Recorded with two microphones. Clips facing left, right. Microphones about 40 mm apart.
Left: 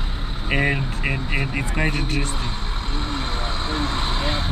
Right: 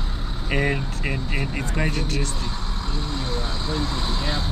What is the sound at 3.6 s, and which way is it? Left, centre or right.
Vehicle, left.